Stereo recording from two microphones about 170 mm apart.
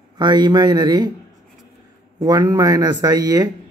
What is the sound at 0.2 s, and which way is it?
Speech, 25° right (ahead or behind).